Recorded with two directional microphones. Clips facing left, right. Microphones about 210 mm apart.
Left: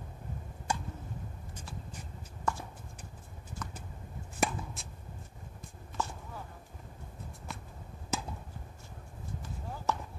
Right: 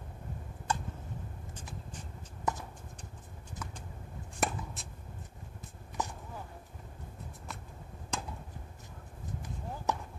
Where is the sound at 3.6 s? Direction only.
10° right (ahead or behind).